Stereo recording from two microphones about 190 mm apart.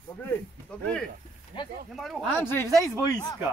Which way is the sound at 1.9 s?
Centre (ahead or behind).